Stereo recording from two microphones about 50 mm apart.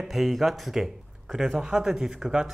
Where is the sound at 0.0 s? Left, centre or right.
Centre.